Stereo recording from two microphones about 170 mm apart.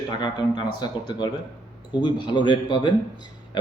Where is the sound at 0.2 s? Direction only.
25° left (ahead or behind).